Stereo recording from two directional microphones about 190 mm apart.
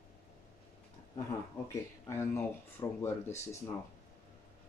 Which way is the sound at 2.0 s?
15° left (ahead or behind).